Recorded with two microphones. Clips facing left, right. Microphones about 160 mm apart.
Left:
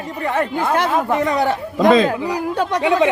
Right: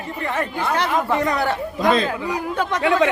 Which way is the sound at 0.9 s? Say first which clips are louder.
Left 3 dB; 20° left (ahead or behind).